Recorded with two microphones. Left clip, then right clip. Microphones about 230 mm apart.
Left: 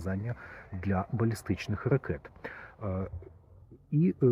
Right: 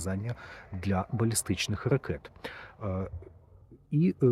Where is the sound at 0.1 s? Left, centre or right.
Centre.